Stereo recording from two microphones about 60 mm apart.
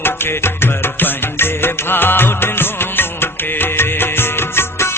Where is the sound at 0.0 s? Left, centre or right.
Left.